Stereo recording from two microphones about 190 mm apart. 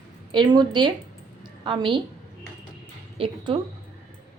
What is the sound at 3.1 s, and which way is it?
Speech, 25° right (ahead or behind).